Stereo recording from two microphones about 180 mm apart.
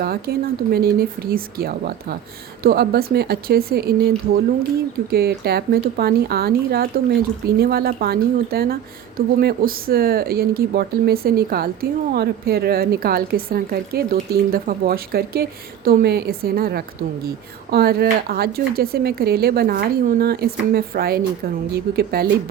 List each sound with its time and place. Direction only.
0.0 s speech: 60° right (ahead or behind)
5.1 s speech: 60° right (ahead or behind)